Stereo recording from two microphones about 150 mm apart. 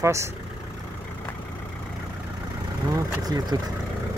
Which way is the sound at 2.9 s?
25° right (ahead or behind).